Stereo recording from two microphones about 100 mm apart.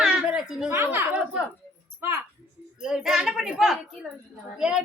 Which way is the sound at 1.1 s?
5° right (ahead or behind).